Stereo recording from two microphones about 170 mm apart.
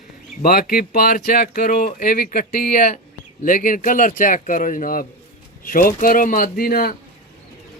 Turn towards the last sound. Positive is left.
turn(degrees=60)  # may be behind; listen again after turning